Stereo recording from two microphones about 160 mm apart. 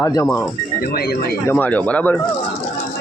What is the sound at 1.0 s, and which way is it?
Speech, 75° left (ahead or behind).